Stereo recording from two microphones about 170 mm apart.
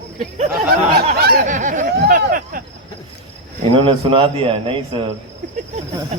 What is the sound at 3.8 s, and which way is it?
Speech, 30° right (ahead or behind).